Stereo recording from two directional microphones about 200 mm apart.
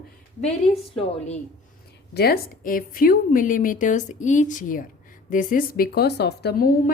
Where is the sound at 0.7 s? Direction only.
30° left (ahead or behind).